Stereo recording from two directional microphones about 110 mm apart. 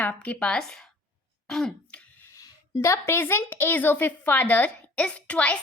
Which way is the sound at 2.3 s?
30° left (ahead or behind).